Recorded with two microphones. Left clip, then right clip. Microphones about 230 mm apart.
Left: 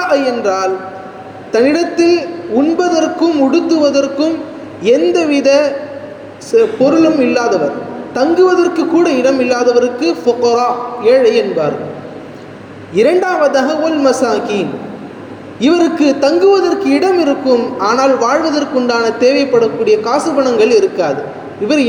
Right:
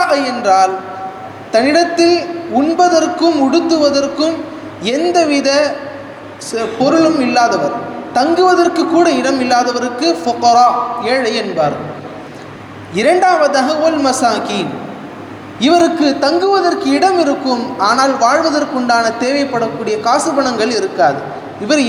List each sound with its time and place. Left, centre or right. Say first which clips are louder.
0.0 s a man's voice: left 1 dB; centre
12.9 s a man's voice: right 1 dB; centre